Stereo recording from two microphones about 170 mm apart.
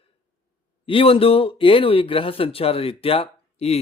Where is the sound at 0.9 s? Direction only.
35° left (ahead or behind).